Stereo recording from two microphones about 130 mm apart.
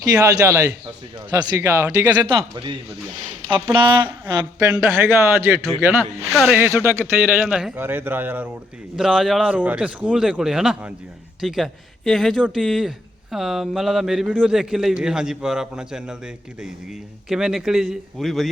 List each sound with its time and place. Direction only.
0.0 s speech: 25° right (ahead or behind)
2.2 s speech: 40° right (ahead or behind)
4.7 s speech: 15° right (ahead or behind)
6.3 s a man's voice: 5° right (ahead or behind)
6.6 s speech: 15° right (ahead or behind)
7.4 s a man's voice: 5° right (ahead or behind)
7.8 s speech: 15° right (ahead or behind)
9.0 s a man's voice: centre (ahead or behind)